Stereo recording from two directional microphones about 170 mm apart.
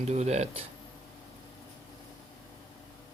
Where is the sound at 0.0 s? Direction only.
40° right (ahead or behind).